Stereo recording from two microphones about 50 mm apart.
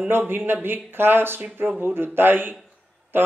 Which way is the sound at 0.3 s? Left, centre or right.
Right.